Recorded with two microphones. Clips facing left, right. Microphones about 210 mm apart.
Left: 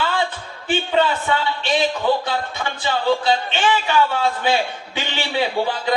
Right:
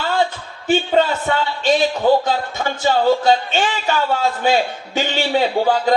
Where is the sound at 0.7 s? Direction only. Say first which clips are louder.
Right 3 dB; 45° right (ahead or behind).